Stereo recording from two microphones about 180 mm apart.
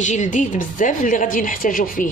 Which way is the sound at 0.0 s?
40° left (ahead or behind).